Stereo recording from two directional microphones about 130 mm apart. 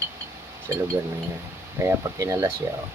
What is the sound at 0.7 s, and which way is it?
Speech, 25° right (ahead or behind).